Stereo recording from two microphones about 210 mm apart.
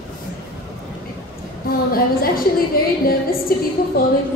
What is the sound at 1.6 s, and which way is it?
A woman's voice, 45° left (ahead or behind).